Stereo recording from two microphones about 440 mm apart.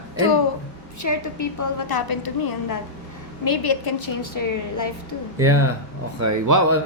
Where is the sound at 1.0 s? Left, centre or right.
Left.